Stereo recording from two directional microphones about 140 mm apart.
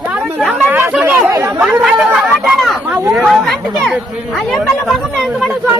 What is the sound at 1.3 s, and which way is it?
Speech, 25° right (ahead or behind).